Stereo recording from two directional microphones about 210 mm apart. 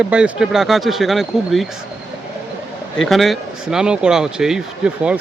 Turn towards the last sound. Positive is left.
turn(degrees=-5)  # may be behind; listen again after turning